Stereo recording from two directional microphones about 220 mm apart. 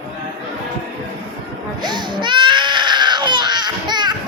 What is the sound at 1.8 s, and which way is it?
Baby cry, 20° right (ahead or behind).